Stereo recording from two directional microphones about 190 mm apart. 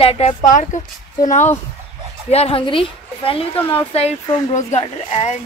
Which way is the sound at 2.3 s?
30° left (ahead or behind).